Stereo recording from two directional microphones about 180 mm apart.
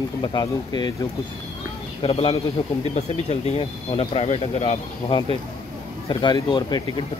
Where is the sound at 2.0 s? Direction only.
30° left (ahead or behind).